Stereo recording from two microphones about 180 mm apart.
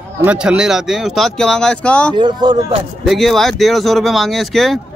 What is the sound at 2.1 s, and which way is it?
Speech, 25° right (ahead or behind).